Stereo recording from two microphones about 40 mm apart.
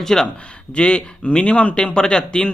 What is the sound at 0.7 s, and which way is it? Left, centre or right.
Speech, left.